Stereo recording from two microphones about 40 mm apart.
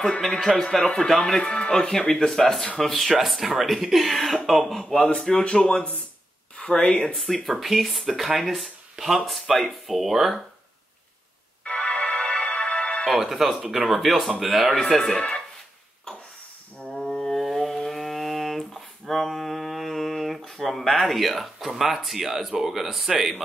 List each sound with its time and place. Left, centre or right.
0.4 s speech: centre
4.8 s speech: centre
6.5 s speech: left
7.4 s speech: centre
11.6 s music: left
12.2 s music: left
13.0 s speech: centre
14.8 s speech: centre
15.1 s speech: left
16.9 s a sound: centre